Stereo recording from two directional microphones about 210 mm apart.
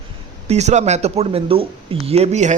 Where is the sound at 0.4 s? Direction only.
30° right (ahead or behind).